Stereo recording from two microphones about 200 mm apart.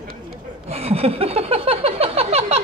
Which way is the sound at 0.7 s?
30° right (ahead or behind).